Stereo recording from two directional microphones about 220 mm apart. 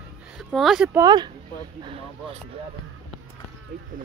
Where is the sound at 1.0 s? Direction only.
20° right (ahead or behind).